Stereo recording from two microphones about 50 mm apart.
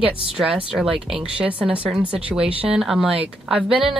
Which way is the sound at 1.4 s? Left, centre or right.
Right.